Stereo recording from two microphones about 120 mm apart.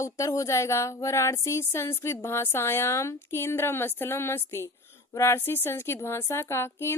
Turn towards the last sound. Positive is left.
turn(degrees=20)  # may be behind; listen again after turning